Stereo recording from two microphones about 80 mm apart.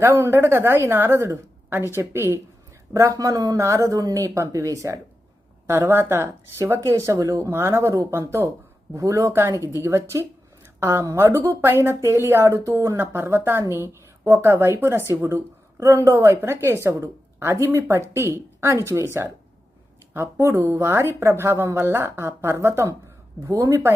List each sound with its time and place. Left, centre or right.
0.0 s speech: right
2.9 s speech: right
20.3 s speech: right
23.4 s speech: right